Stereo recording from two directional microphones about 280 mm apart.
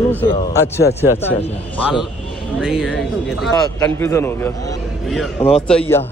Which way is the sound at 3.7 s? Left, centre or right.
Centre.